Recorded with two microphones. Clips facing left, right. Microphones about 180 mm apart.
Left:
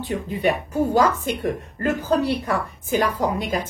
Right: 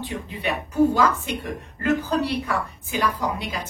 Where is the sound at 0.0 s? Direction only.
45° left (ahead or behind).